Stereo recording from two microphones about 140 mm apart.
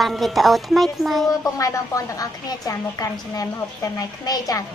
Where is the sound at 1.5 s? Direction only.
25° left (ahead or behind).